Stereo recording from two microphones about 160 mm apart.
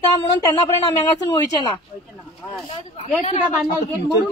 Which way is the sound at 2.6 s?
35° left (ahead or behind).